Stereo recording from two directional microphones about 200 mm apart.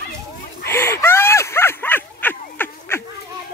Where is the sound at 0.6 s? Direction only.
10° left (ahead or behind).